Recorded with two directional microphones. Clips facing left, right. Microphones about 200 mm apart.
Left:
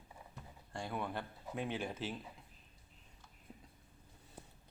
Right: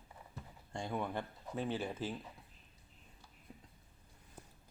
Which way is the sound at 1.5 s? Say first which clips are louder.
Right 2 dB; 10° left (ahead or behind).